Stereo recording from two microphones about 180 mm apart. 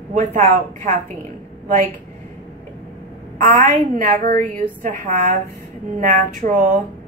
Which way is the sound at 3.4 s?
50° right (ahead or behind).